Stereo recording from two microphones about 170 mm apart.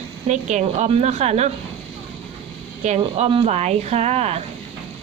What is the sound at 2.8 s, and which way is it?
Speech, 40° right (ahead or behind).